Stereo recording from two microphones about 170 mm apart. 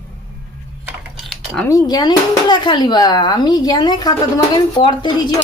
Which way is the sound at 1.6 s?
20° left (ahead or behind).